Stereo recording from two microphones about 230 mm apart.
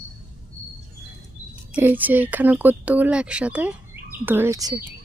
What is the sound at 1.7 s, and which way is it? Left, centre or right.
Speech, centre.